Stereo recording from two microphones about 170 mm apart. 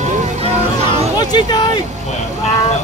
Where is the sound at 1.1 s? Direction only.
25° left (ahead or behind).